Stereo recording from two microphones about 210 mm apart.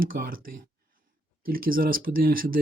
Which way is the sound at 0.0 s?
45° right (ahead or behind).